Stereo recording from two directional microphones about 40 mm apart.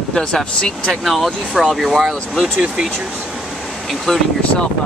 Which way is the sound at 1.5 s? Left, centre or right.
Centre.